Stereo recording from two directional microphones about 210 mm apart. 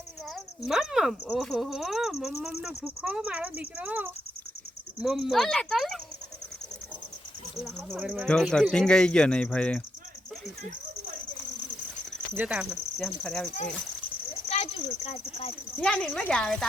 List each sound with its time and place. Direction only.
0.3 s speech: centre (ahead or behind)
7.5 s speech: centre (ahead or behind)
12.3 s speech: 5° right (ahead or behind)
14.5 s speech: 25° left (ahead or behind)
15.8 s speech: 5° left (ahead or behind)